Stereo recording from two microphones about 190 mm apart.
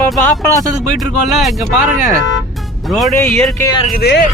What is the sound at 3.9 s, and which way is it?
Speech, 60° left (ahead or behind).